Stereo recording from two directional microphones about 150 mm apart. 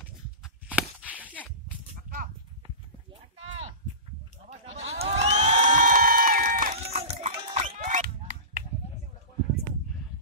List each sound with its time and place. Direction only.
0.4 s walk: 5° right (ahead or behind)
4.5 s crowd: 45° right (ahead or behind); by 6.7 s 70° right (ahead or behind)
6.9 s crowd: 45° right (ahead or behind)
7.7 s a sound: 55° right (ahead or behind)